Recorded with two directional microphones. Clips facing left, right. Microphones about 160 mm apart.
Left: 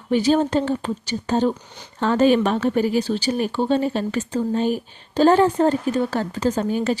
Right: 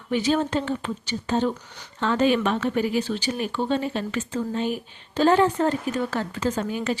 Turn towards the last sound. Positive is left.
turn(degrees=35)  # may be behind; listen again after turning